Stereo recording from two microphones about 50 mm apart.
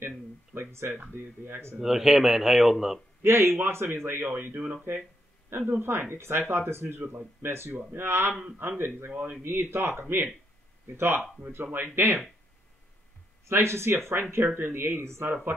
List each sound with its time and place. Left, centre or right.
0.6 s speech: right
1.8 s speech: centre
3.3 s a man's voice: right
5.7 s a man's voice: right
13.5 s a man's voice: right